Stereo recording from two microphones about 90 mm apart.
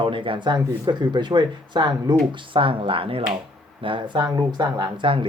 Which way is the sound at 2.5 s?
75° right (ahead or behind).